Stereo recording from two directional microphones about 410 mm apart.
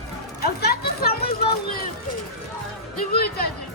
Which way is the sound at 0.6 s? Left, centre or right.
Left.